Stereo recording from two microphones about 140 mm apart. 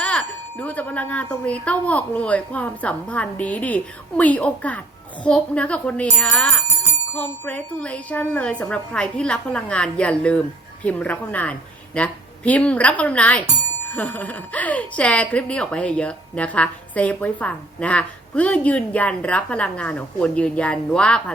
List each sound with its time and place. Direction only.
0.0 s speech: 10° left (ahead or behind)